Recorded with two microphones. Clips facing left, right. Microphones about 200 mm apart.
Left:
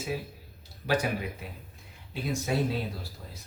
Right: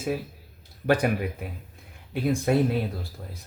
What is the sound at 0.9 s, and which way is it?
Speech, 55° right (ahead or behind).